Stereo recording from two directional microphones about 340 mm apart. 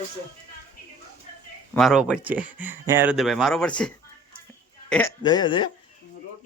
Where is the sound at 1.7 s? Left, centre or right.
Centre.